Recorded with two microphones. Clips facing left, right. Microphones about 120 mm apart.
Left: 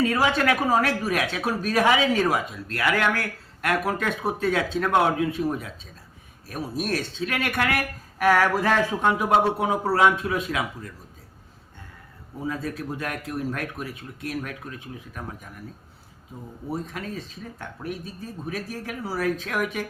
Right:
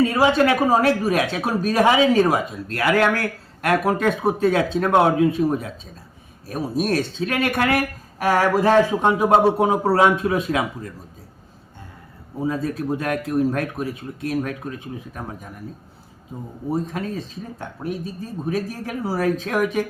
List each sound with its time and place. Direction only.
0.0 s speech: 30° right (ahead or behind)
12.4 s speech: 35° right (ahead or behind)
16.8 s speech: 35° right (ahead or behind)